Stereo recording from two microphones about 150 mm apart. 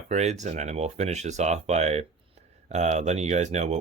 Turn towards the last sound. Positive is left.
turn(degrees=-50)  # may be behind; listen again after turning